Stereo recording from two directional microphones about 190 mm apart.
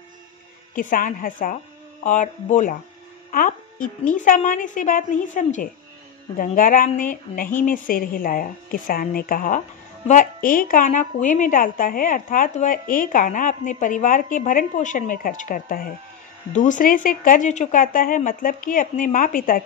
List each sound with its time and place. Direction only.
0.7 s a woman's voice: 45° left (ahead or behind)
3.3 s music: 45° left (ahead or behind)
4.1 s a woman's voice: 45° left (ahead or behind)